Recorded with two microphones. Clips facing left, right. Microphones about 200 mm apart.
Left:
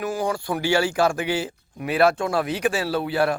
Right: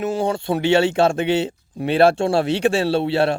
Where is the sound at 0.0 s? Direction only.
25° right (ahead or behind).